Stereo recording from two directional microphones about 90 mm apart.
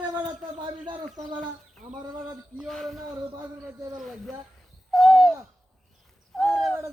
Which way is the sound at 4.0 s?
Centre (ahead or behind).